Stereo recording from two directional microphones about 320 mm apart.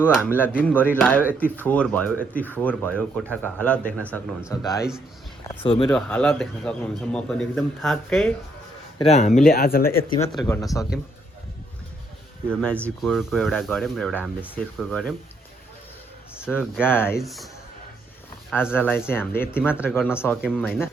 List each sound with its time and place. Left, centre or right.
0.0 s a man's voice: centre
5.6 s speech: centre
5.9 s a man's voice: centre
9.0 s speech: centre
10.0 s speech: centre
12.5 s a man's voice: centre
16.5 s a man's voice: centre
18.5 s a man's voice: centre